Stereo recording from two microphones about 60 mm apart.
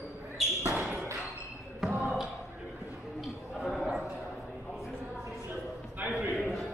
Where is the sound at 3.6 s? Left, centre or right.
Centre.